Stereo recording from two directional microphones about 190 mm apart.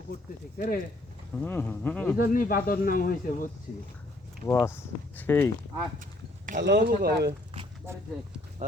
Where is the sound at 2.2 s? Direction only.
45° left (ahead or behind).